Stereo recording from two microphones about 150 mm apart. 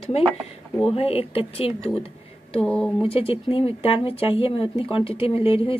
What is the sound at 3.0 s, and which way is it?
Speech, 40° left (ahead or behind).